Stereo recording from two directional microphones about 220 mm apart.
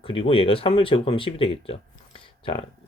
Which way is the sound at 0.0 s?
25° left (ahead or behind).